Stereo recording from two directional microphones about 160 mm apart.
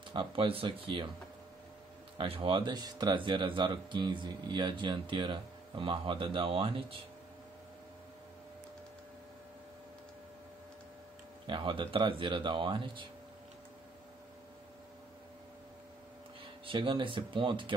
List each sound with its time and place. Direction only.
0.1 s speech: 30° right (ahead or behind)
2.1 s speech: 35° right (ahead or behind)
11.4 s speech: 30° right (ahead or behind)
16.6 s speech: 30° right (ahead or behind)